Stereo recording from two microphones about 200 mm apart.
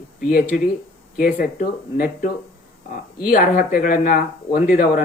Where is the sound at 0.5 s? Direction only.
45° left (ahead or behind).